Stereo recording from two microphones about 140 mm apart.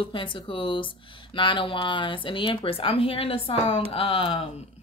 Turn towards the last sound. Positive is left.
turn(degrees=40)  # may be behind; listen again after turning